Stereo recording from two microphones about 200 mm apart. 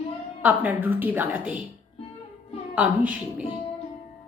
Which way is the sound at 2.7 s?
5° right (ahead or behind).